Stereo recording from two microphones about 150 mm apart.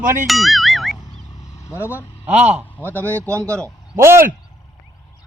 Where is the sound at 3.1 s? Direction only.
20° right (ahead or behind).